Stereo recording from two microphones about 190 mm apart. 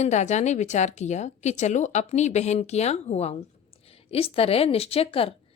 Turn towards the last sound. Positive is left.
turn(degrees=30)  # may be behind; listen again after turning